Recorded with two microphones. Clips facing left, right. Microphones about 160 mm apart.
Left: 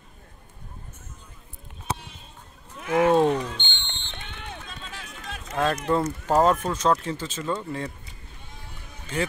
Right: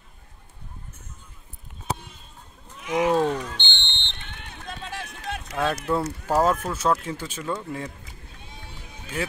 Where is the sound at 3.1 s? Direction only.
20° left (ahead or behind).